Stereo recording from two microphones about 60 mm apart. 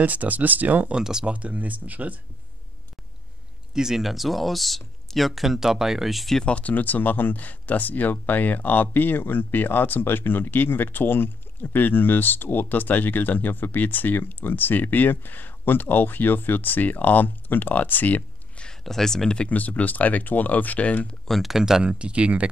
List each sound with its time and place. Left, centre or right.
0.0 s speech: right
0.9 s speech: centre
1.3 s speech: right
3.7 s speech: centre
6.4 s speech: left
18.6 s speech: centre
21.3 s speech: centre
21.9 s speech: centre